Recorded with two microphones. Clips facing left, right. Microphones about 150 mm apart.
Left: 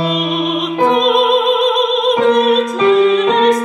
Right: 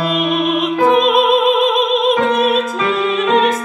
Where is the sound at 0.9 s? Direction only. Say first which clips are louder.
Even; centre (ahead or behind).